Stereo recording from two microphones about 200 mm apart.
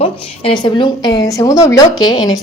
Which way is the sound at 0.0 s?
25° left (ahead or behind).